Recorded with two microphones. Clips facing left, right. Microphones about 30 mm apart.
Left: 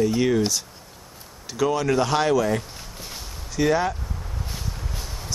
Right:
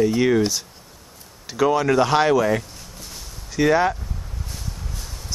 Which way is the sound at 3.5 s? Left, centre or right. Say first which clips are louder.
Right 3 dB; centre.